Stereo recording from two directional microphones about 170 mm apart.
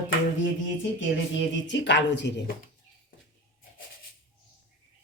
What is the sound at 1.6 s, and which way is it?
Speech, 90° left.